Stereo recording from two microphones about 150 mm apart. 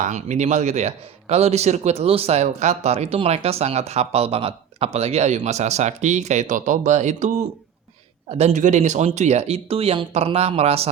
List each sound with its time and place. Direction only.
0.0 s speech: 50° right (ahead or behind)